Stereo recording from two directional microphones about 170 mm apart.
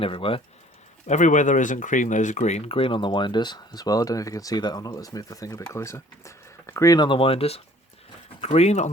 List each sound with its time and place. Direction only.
0.0 s speech: 30° left (ahead or behind)
1.0 s speech: 45° left (ahead or behind)